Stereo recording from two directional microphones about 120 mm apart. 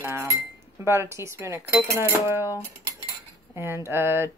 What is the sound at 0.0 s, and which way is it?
Speech, 20° right (ahead or behind).